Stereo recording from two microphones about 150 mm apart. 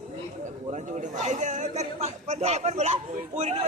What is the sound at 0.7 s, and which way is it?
A man's voice, 50° right (ahead or behind).